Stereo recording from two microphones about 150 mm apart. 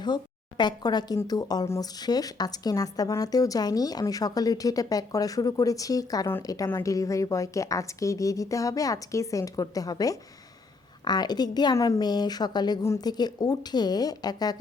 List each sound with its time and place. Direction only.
0.0 s speech: 30° left (ahead or behind)